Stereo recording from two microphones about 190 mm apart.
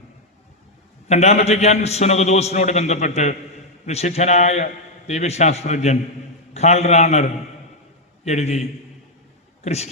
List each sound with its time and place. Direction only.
1.0 s a man's voice: 35° left (ahead or behind)
9.6 s a man's voice: 35° left (ahead or behind)